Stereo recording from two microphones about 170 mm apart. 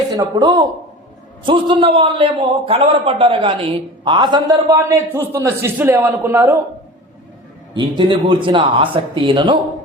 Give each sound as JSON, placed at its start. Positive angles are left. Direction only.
{"t": 0.2, "sound": "a man's voice", "side_deg": -20}
{"t": 7.7, "sound": "speech", "side_deg": -30}